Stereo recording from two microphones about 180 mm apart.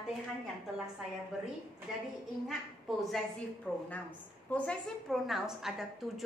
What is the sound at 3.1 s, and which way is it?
A woman's voice, 5° left (ahead or behind).